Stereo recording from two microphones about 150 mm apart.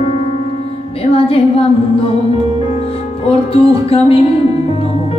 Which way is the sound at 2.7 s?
40° left (ahead or behind).